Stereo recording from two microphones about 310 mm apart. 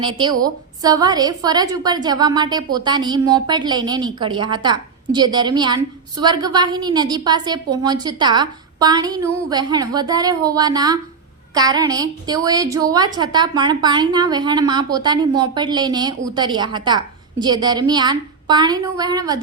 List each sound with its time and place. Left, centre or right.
0.0 s a woman's voice: centre